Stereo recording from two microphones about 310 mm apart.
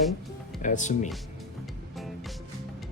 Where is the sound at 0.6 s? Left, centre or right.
Left.